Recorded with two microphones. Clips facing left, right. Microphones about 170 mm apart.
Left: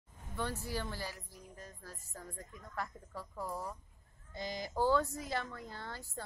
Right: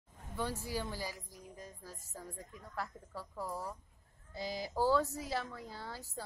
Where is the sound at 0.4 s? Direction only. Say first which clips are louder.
Right 1 dB; 10° right (ahead or behind).